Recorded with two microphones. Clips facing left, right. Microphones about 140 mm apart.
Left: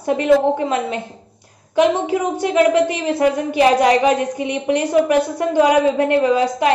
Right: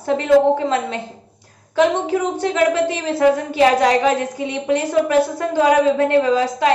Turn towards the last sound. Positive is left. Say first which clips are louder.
# even
turn(degrees=15)  # may be behind; listen again after turning